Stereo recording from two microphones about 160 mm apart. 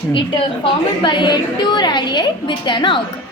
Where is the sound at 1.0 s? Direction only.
30° left (ahead or behind).